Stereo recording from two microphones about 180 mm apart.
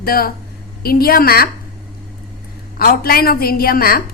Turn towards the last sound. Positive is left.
turn(degrees=55)  # may be behind; listen again after turning